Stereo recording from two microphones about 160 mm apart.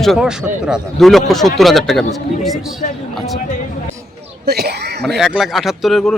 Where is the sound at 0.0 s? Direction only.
Centre (ahead or behind).